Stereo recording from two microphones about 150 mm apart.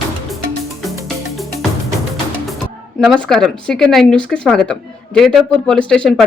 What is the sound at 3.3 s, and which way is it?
Speech, 5° left (ahead or behind).